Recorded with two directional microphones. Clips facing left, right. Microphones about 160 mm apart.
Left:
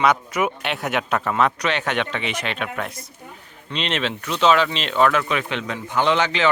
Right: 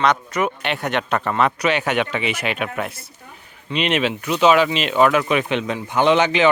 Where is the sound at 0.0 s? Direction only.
10° left (ahead or behind).